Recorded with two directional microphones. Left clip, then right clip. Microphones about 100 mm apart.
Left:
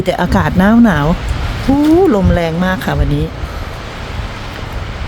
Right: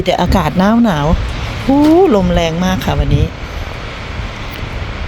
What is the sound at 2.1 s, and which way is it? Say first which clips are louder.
Speech: right 1 dB; 20° left (ahead or behind).